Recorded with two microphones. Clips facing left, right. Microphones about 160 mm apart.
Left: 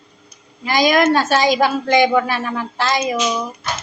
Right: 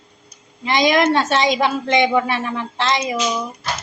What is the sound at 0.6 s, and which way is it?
A woman's voice, 25° right (ahead or behind).